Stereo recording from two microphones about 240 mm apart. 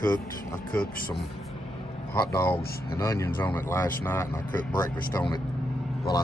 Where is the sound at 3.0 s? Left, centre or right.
Centre.